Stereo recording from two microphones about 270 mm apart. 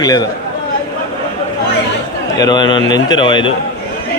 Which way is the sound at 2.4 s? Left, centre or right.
Centre.